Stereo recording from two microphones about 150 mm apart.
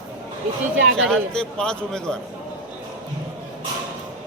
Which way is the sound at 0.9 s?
5° left (ahead or behind).